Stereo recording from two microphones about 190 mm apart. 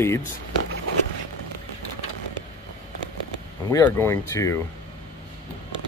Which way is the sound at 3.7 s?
15° left (ahead or behind).